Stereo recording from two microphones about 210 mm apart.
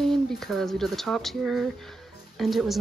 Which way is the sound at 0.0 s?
Centre (ahead or behind).